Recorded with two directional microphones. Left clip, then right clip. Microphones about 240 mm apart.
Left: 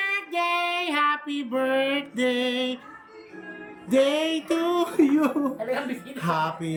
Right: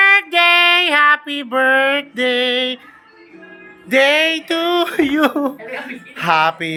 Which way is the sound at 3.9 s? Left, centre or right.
Centre.